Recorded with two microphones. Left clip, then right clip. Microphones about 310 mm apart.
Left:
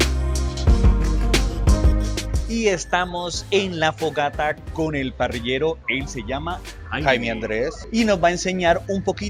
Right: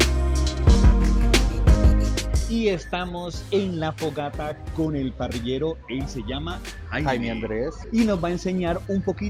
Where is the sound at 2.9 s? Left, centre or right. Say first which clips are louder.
Left 7 dB; left.